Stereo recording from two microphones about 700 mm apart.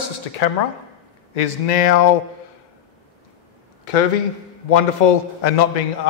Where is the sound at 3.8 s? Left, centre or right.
Left.